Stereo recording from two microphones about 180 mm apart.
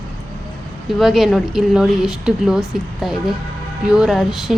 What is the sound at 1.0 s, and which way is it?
Speech, centre (ahead or behind).